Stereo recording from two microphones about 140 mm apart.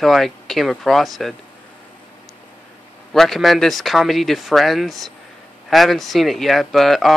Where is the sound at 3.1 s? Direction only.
Centre (ahead or behind).